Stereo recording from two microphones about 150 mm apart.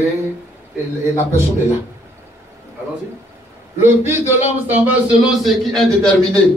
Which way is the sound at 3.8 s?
15° right (ahead or behind).